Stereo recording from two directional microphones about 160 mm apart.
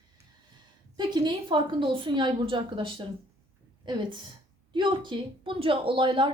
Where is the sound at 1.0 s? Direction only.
25° right (ahead or behind).